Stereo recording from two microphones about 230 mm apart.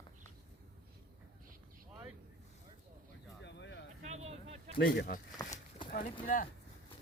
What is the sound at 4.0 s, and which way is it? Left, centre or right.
Vehicle, right.